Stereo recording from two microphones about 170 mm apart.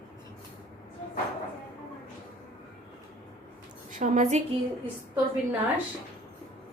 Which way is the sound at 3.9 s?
50° right (ahead or behind).